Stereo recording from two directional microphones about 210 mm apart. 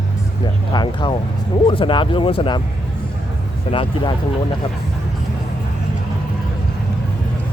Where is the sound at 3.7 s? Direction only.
25° left (ahead or behind).